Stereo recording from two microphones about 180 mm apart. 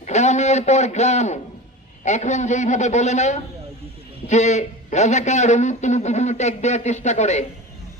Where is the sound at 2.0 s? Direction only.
40° left (ahead or behind).